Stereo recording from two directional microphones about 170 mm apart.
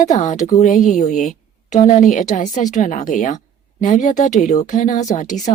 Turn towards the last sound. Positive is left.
turn(degrees=45)  # may be behind; listen again after turning